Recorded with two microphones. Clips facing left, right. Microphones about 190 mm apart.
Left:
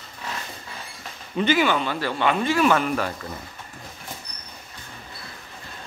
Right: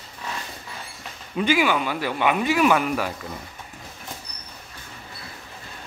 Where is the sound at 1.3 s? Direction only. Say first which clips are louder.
Even; 5° right (ahead or behind).